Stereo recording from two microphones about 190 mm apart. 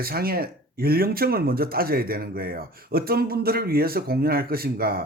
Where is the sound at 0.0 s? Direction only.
50° right (ahead or behind).